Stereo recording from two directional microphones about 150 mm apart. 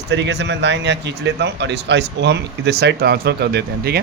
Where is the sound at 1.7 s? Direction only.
90° right.